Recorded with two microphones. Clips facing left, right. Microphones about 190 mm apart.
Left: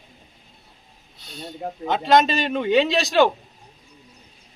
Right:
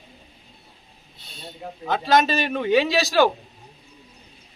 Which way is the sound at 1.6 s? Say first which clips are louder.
Left 5 dB; 45° left (ahead or behind).